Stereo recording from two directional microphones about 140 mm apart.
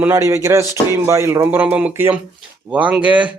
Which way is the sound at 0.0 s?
20° right (ahead or behind).